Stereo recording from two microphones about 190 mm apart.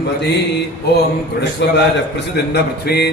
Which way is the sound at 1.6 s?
65° left (ahead or behind).